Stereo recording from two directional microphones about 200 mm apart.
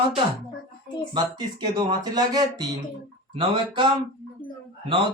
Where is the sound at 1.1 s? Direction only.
20° right (ahead or behind).